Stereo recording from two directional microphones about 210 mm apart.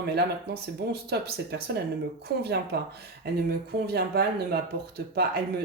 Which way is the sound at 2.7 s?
50° right (ahead or behind).